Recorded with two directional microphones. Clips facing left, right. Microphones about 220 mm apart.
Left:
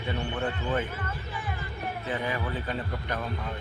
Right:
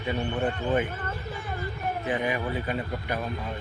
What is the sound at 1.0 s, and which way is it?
Speech, 45° right (ahead or behind).